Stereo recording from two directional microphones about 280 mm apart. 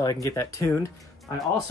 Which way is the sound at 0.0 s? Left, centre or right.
Centre.